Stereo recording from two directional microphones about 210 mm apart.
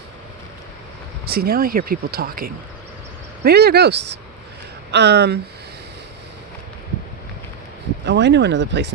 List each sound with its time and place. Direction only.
1.2 s speech: 45° right (ahead or behind)
8.0 s speech: 55° right (ahead or behind)